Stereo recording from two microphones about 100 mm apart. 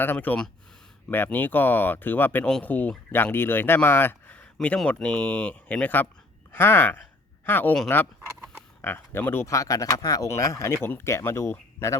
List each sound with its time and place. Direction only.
0.0 s speech: 20° left (ahead or behind)
8.8 s speech: 20° left (ahead or behind)